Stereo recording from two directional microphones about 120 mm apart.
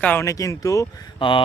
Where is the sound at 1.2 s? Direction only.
45° left (ahead or behind).